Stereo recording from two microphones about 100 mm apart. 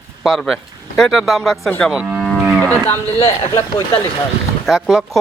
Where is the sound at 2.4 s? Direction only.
25° right (ahead or behind).